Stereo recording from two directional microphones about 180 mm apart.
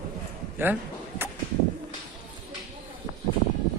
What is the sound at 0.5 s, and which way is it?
Speech, 10° right (ahead or behind).